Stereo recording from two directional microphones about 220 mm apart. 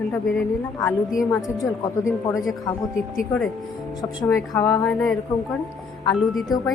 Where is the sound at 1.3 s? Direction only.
15° left (ahead or behind).